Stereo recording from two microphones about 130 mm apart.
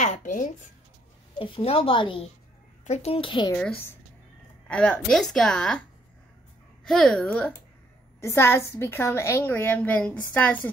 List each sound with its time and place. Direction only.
0.0 s speech: 75° left (ahead or behind)
1.4 s a woman's voice: 45° left (ahead or behind)
2.8 s a woman's voice: 55° left (ahead or behind); by 3.5 s 40° left (ahead or behind)
3.5 s a woman's voice: 10° left (ahead or behind)